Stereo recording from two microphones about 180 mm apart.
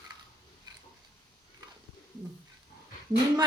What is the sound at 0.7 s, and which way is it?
Pig, 20° right (ahead or behind).